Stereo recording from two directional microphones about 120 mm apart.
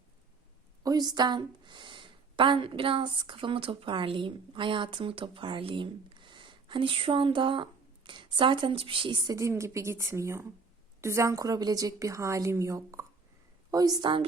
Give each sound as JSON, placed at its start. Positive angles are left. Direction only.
{"t": 0.8, "sound": "speech", "side_deg": -35}
{"t": 9.3, "sound": "a woman's voice", "side_deg": -25}